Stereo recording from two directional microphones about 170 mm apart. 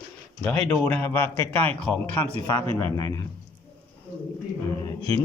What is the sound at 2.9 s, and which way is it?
Speech, 20° left (ahead or behind).